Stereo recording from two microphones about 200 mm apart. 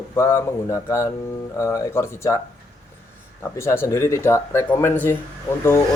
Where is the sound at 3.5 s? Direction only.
15° left (ahead or behind).